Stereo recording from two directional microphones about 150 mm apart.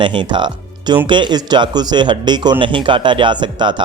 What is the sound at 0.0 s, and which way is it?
A man's voice, 30° right (ahead or behind).